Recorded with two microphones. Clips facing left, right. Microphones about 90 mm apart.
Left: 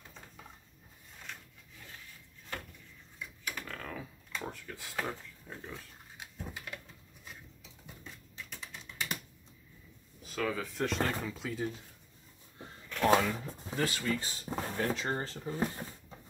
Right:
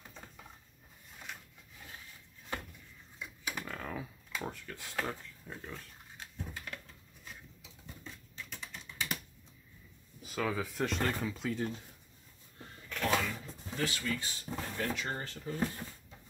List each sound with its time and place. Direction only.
3.2 s computer keyboard: 15° right (ahead or behind); by 6.8 s 5° left (ahead or behind)
7.2 s a sound: 5° left (ahead or behind)
10.2 s speech: 5° right (ahead or behind)
12.6 s a sound: 20° left (ahead or behind)
13.0 s speech: 45° left (ahead or behind)
15.5 s speech: 20° left (ahead or behind)